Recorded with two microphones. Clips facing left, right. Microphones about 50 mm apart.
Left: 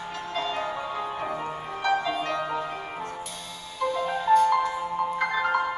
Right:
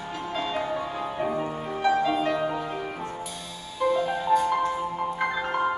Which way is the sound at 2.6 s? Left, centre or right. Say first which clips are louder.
Right 1 dB; centre.